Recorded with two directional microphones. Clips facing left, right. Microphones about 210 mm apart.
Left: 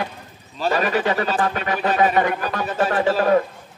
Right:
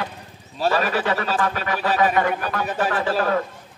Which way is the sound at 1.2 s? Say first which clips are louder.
Left 2 dB; 25° left (ahead or behind).